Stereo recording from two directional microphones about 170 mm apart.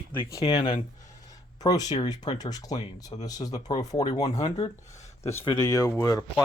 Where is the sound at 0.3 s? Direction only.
25° left (ahead or behind).